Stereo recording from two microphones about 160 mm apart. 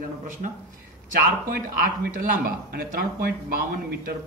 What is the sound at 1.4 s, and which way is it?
Speech, 60° right (ahead or behind).